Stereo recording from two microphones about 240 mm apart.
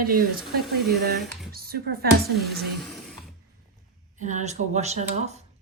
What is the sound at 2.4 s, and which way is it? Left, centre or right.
Speech, centre.